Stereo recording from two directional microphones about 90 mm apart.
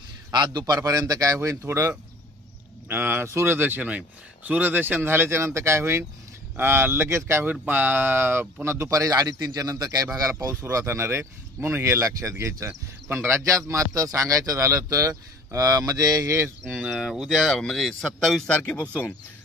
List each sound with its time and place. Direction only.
0.3 s speech: 50° right (ahead or behind); by 16.5 s 35° right (ahead or behind)
16.9 s speech: centre (ahead or behind)
18.6 s speech: 15° left (ahead or behind)